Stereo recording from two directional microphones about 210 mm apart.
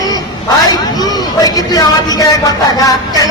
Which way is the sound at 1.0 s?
20° left (ahead or behind).